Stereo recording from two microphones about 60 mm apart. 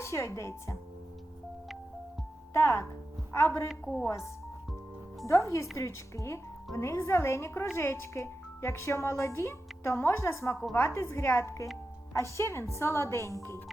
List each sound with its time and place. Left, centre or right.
0.0 s speech: left
2.5 s speech: left